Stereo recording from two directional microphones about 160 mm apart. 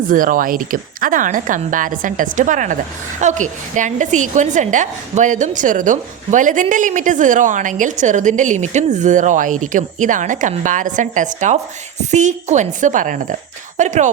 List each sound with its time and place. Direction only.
0.1 s a woman's voice: 60° right (ahead or behind)